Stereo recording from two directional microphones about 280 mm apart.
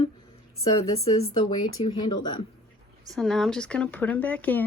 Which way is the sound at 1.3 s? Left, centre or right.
Centre.